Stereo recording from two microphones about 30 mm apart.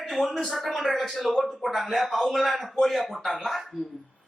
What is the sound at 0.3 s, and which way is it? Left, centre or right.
A man's voice, centre.